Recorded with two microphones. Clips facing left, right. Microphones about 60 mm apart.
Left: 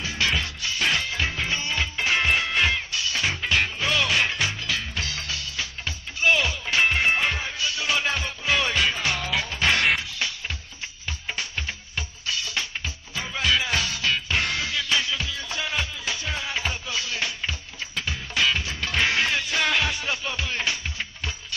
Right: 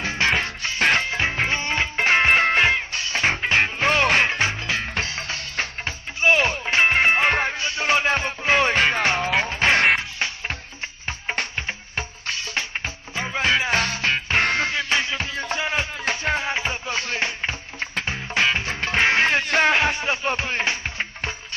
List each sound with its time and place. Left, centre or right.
0.0 s music: right